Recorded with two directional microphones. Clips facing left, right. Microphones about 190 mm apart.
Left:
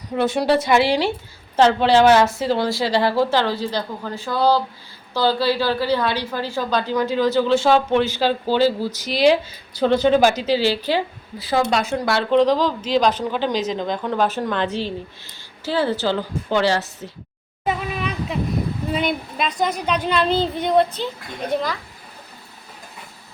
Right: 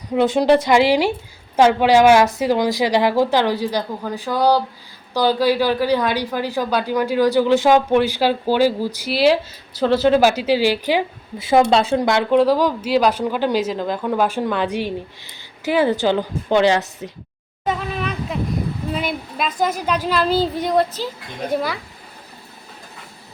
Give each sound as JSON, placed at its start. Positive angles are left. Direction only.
{"t": 0.1, "sound": "a woman's voice", "side_deg": -15}
{"t": 11.3, "sound": "speech", "side_deg": -25}
{"t": 12.0, "sound": "a woman's voice", "side_deg": -15}
{"t": 17.7, "sound": "a sound", "side_deg": 0}
{"t": 18.9, "sound": "a woman's voice", "side_deg": 0}